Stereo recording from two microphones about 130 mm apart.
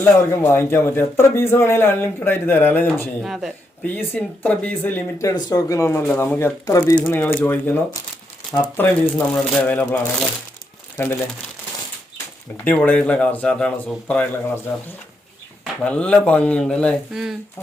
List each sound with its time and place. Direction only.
0.0 s speech: 15° left (ahead or behind)
3.2 s speech: centre (ahead or behind)
3.8 s speech: 15° left (ahead or behind)
5.3 s speech: 30° left (ahead or behind)
7.0 s speech: 10° left (ahead or behind)
8.8 s speech: 15° left (ahead or behind)
10.9 s speech: 15° left (ahead or behind)
12.5 s speech: 10° left (ahead or behind)
15.8 s speech: 10° left (ahead or behind)